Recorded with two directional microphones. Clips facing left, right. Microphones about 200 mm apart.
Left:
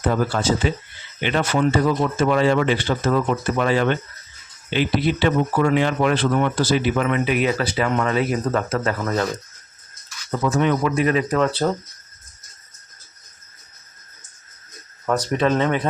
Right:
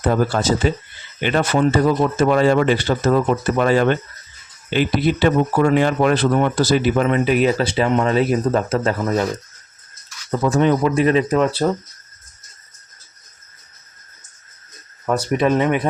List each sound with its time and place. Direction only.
0.0 s a man's voice: 40° right (ahead or behind)
10.4 s speech: 35° right (ahead or behind)
11.3 s speech: 10° right (ahead or behind)
15.0 s speech: 10° right (ahead or behind)